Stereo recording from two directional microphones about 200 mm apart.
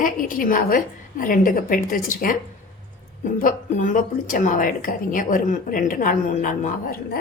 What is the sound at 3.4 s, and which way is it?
A woman's voice, 40° left (ahead or behind).